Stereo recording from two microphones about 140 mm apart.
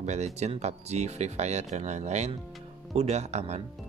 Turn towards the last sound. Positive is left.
turn(degrees=-55)  # may be behind; listen again after turning